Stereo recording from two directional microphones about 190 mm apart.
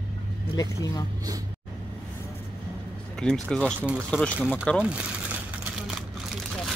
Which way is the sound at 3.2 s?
5° left (ahead or behind).